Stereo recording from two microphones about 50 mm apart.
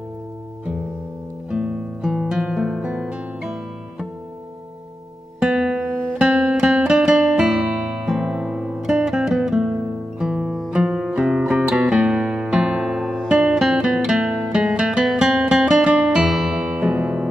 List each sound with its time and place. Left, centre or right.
1.5 s guitar: centre
3.0 s music: centre
5.4 s music: centre
12.8 s music: centre
13.3 s music: centre
16.1 s music: centre; by 17.3 s right